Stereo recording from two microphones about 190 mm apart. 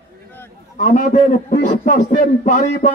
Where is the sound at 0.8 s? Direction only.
45° left (ahead or behind).